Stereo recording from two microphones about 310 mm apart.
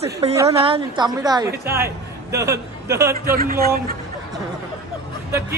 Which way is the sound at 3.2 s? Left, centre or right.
Right.